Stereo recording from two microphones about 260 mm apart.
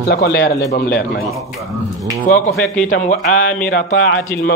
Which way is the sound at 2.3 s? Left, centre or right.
Left.